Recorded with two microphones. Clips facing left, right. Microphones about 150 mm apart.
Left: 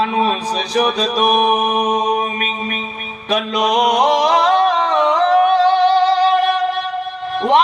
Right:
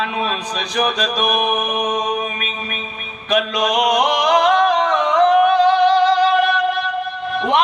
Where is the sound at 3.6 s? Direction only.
30° left (ahead or behind).